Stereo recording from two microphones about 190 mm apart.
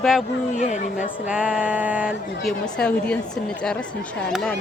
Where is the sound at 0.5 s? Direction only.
40° left (ahead or behind).